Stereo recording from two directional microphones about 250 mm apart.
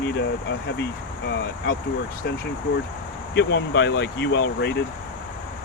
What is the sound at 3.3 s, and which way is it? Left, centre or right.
Speech, left.